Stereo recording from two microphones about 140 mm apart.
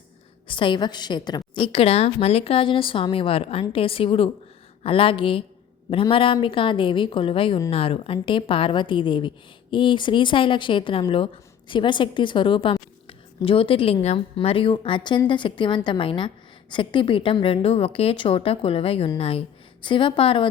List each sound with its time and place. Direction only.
0.4 s a woman's voice: 35° left (ahead or behind)